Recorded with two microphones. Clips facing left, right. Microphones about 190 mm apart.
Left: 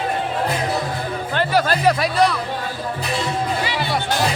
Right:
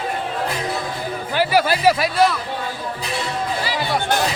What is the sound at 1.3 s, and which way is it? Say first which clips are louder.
Speech: right 1 dB; 10° right (ahead or behind).